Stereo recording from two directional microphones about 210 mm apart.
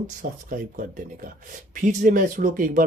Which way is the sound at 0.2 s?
40° right (ahead or behind).